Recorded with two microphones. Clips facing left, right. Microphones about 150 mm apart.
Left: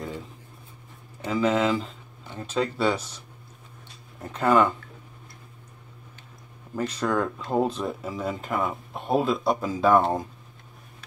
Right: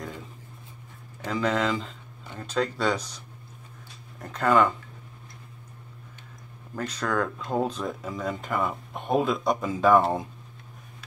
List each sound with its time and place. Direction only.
1.2 s speech: 5° left (ahead or behind)
4.2 s speech: 10° left (ahead or behind)
6.7 s speech: 10° left (ahead or behind)